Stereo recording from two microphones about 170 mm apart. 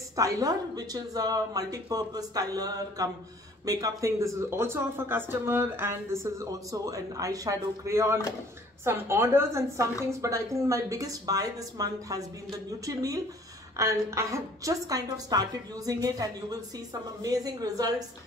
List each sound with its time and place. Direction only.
0.1 s a woman's voice: 20° right (ahead or behind)